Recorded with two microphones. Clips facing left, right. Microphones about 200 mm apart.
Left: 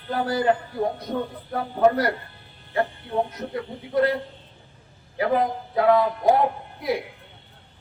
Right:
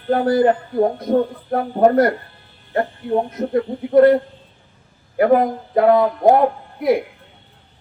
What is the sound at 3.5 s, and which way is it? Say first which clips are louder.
Speech: right 13 dB; 50° right (ahead or behind).